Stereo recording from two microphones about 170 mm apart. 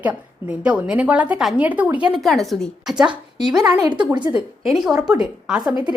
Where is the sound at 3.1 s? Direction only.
25° right (ahead or behind).